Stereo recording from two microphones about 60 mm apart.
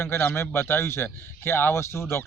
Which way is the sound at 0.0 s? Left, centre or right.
Left.